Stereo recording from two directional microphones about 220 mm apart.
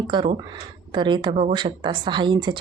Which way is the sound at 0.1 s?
20° right (ahead or behind).